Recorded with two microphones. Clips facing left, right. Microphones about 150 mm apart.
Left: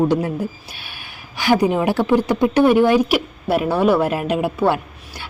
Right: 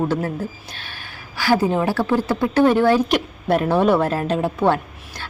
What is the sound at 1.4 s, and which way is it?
A woman's voice, 20° left (ahead or behind).